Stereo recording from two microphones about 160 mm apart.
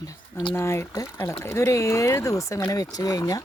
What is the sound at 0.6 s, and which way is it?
Speech, 15° left (ahead or behind).